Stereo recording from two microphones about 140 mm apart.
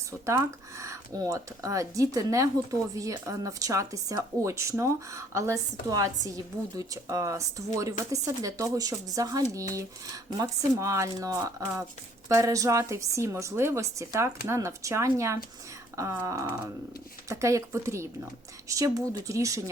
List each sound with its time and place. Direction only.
0.1 s speech: 20° right (ahead or behind)